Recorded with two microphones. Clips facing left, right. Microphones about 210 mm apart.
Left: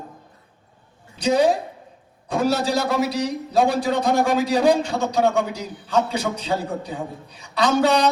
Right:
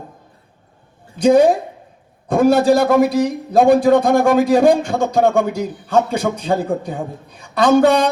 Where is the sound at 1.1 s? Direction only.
50° right (ahead or behind).